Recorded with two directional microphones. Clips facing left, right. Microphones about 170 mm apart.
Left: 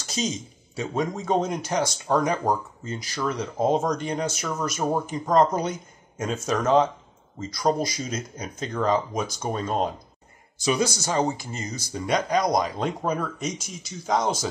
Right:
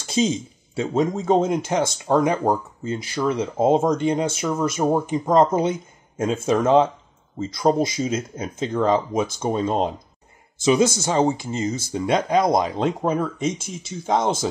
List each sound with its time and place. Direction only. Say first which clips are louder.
0.0 s a sound: right 8 dB; 25° right (ahead or behind)
0.7 s speech: right 6 dB; 25° right (ahead or behind)
2.4 s speech: right 4 dB; 25° right (ahead or behind)